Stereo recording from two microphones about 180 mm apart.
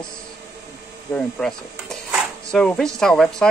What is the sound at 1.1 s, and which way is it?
Cutlery, 5° left (ahead or behind).